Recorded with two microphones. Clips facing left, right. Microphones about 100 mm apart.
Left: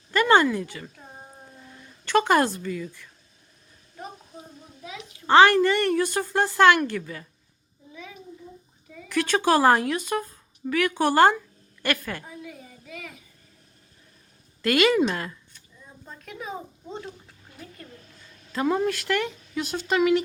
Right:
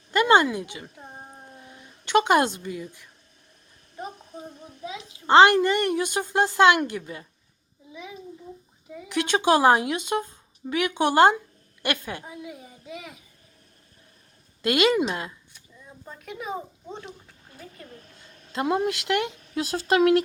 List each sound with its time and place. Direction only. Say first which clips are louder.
0.1 s a sound: even; 20° right (ahead or behind)
4.6 s a child's voice: right 2 dB; 25° right (ahead or behind)
8.9 s a woman's voice: even; 15° right (ahead or behind)
14.6 s a woman's voice: left 1 dB; 15° right (ahead or behind)
18.6 s a child's voice: left 1 dB; 15° right (ahead or behind)
19.7 s speech: right 2 dB; 40° right (ahead or behind)